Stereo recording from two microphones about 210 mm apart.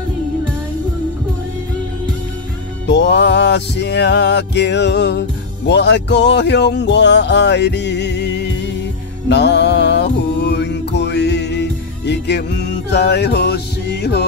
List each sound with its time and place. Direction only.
2.9 s music: 55° left (ahead or behind)